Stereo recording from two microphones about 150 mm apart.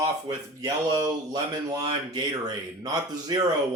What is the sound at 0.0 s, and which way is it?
Speech, 25° right (ahead or behind).